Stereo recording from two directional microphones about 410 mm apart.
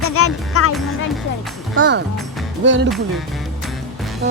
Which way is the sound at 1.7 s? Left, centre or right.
Right.